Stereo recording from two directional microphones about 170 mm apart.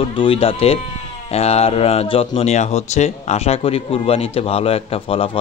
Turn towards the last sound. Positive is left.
turn(degrees=30)  # may be behind; listen again after turning